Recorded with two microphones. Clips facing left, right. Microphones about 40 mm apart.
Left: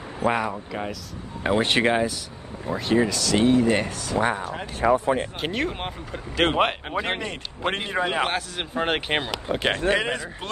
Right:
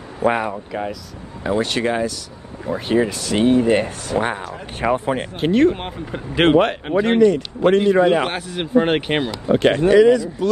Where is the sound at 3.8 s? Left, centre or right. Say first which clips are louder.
Right 3 dB; right.